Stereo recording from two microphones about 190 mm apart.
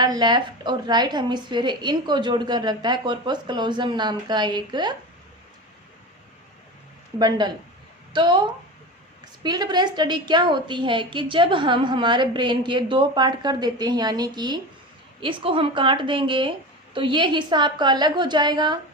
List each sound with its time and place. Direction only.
0.0 s a woman's voice: 20° right (ahead or behind)
7.2 s a woman's voice: 20° right (ahead or behind)